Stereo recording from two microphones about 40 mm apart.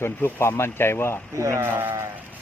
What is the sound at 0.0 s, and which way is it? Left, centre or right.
Speech, left.